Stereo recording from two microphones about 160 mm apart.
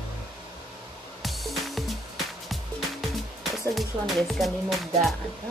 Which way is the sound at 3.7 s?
Centre (ahead or behind).